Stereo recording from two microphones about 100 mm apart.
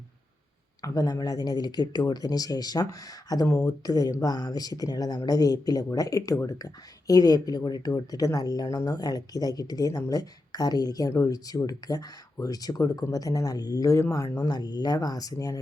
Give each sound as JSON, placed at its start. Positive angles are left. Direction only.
{"t": 0.8, "sound": "speech", "side_deg": 35}